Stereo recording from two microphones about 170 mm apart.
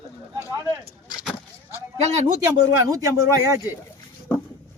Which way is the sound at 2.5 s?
20° right (ahead or behind).